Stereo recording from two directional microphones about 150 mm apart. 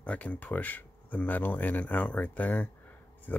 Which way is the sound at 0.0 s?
10° left (ahead or behind).